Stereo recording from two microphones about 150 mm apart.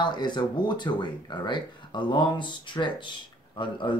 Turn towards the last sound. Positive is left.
turn(degrees=30)  # may be behind; listen again after turning